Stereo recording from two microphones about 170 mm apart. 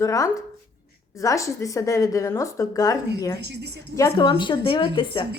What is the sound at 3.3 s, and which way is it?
Speech, 80° right.